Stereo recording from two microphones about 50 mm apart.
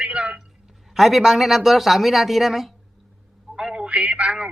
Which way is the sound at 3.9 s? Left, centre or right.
Right.